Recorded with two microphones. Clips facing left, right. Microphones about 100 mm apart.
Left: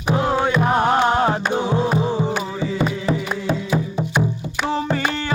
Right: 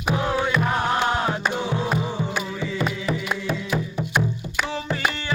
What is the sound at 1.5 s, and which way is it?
Music, 30° left (ahead or behind).